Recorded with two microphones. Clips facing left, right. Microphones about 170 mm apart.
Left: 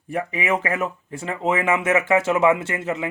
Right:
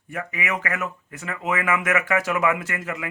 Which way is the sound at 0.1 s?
30° left (ahead or behind).